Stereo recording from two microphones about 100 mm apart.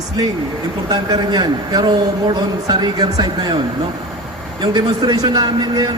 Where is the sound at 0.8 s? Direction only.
45° right (ahead or behind).